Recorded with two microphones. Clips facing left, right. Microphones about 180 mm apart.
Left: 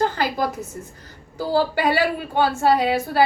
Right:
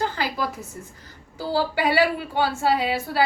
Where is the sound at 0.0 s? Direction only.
50° left (ahead or behind).